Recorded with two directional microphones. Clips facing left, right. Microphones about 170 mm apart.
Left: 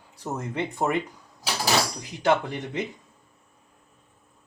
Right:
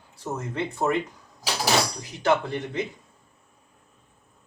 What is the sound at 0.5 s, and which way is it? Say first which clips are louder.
Speech: right 1 dB; 15° left (ahead or behind).